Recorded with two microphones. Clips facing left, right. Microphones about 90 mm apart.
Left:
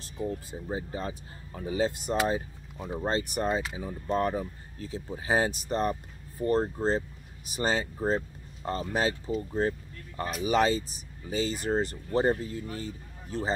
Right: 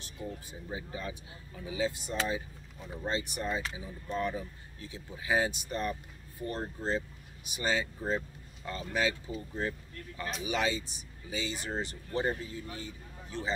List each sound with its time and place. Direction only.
0.7 s speech: 35° left (ahead or behind)